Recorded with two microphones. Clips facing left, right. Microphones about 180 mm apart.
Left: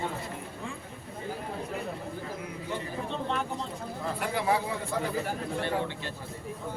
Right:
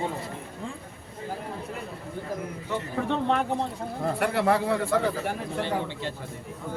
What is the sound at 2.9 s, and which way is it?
Speech, 65° right (ahead or behind).